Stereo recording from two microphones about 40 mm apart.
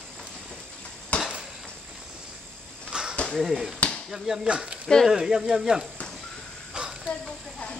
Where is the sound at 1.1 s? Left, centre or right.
Left.